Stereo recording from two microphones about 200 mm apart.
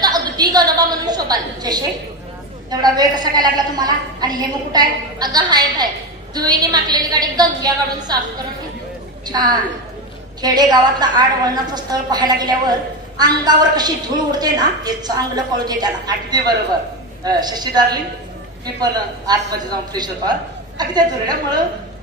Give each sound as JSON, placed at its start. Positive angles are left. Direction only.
{"t": 0.0, "sound": "a sound", "side_deg": -20}
{"t": 2.7, "sound": "a woman's voice", "side_deg": -20}
{"t": 9.3, "sound": "a woman's voice", "side_deg": -20}